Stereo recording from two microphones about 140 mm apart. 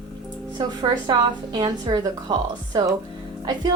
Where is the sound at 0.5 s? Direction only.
30° right (ahead or behind).